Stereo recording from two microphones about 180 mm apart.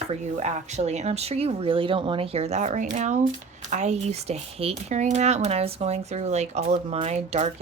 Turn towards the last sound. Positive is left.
turn(degrees=-40)  # may be behind; listen again after turning